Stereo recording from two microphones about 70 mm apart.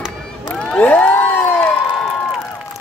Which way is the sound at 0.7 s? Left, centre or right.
Left.